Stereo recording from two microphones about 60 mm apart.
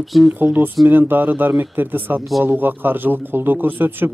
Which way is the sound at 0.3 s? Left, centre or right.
Right.